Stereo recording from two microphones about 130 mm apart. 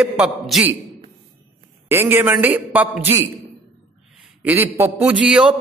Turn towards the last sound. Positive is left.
turn(degrees=-5)  # may be behind; listen again after turning